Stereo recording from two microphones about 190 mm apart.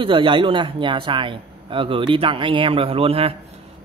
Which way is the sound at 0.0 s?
25° right (ahead or behind).